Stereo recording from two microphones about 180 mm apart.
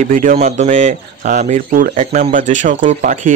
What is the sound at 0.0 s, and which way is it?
Speech, 45° right (ahead or behind).